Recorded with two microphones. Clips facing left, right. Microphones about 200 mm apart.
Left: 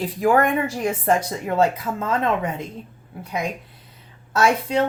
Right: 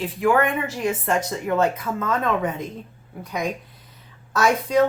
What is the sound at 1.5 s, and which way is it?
Speech, 30° left (ahead or behind).